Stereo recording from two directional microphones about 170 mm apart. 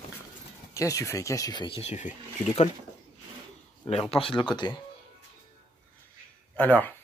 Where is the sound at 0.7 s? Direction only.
20° left (ahead or behind); by 2.1 s 40° left (ahead or behind).